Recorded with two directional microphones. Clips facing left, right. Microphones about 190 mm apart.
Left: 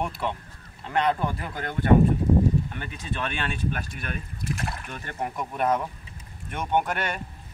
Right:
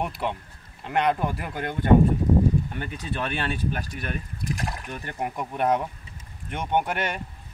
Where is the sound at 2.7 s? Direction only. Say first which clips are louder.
Right 2 dB; 45° right (ahead or behind).